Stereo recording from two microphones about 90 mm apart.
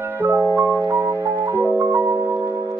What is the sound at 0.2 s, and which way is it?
Music, 20° right (ahead or behind).